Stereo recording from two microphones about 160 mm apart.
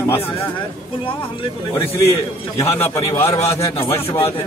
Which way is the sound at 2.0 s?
20° left (ahead or behind).